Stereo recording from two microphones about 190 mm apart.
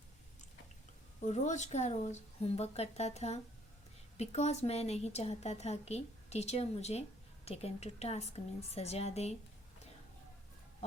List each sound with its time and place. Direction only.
1.2 s a woman's voice: 40° left (ahead or behind)